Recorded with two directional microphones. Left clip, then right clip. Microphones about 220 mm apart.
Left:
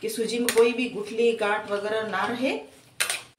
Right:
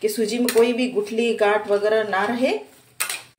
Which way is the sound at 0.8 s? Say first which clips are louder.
Right 3 dB; 45° right (ahead or behind).